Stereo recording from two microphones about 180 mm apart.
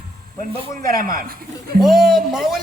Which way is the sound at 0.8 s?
50° right (ahead or behind).